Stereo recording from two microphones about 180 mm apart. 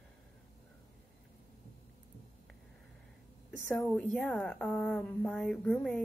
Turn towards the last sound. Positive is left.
turn(degrees=5)  # may be behind; listen again after turning